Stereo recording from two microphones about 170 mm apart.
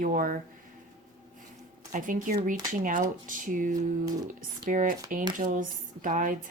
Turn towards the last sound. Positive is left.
turn(degrees=-50)  # may be behind; listen again after turning